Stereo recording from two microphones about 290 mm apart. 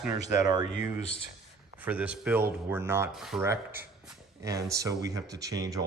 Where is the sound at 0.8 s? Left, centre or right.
Left.